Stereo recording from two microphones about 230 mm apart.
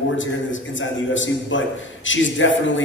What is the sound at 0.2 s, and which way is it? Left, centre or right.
A man's voice, left.